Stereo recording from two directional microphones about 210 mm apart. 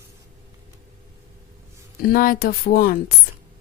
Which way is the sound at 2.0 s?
45° left (ahead or behind).